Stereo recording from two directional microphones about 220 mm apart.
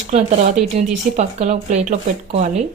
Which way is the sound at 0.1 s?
30° right (ahead or behind).